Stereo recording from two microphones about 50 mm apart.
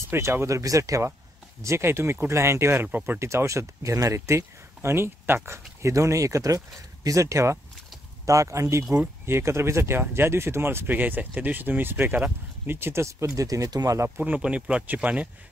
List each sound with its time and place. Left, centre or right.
0.0 s speech: right
1.6 s speech: right
3.2 s speech: right
5.8 s speech: right
9.2 s speech: right
9.9 s speech: right
10.9 s speech: right
12.6 s speech: right
14.1 s speech: right
14.4 s speech: right